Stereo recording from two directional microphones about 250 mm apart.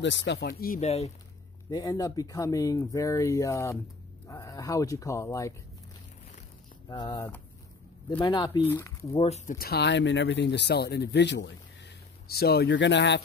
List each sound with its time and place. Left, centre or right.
0.0 s speech: left
1.7 s speech: centre
6.9 s speech: centre; by 13.2 s left